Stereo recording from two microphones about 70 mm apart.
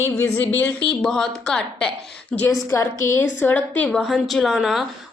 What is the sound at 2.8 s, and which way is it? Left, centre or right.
Speech, left.